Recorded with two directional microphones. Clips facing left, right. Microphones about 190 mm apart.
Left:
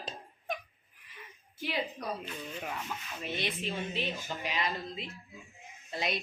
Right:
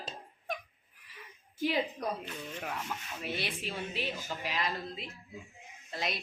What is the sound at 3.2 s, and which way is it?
Speech, 10° right (ahead or behind).